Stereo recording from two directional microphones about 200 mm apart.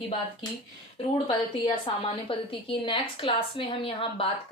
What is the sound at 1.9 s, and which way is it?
A woman's voice, 25° left (ahead or behind).